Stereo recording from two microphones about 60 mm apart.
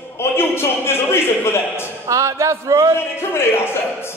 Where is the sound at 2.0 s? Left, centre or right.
Right.